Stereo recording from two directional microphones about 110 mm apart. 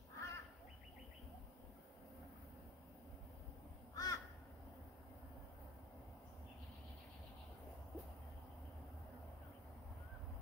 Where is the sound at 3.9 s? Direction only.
35° left (ahead or behind).